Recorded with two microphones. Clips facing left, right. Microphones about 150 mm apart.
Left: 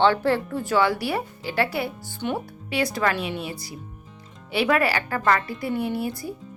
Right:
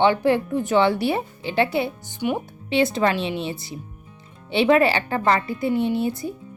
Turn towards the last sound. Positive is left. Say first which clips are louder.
# right 4 dB
turn(degrees=-20)  # may be behind; listen again after turning